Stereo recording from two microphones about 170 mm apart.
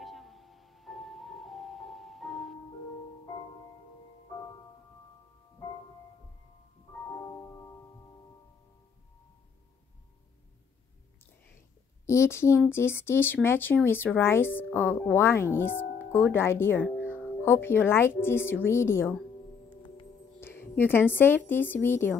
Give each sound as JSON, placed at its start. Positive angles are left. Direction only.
{"t": 0.0, "sound": "music", "side_deg": 0}
{"t": 12.1, "sound": "speech", "side_deg": 15}
{"t": 20.3, "sound": "a woman's voice", "side_deg": 15}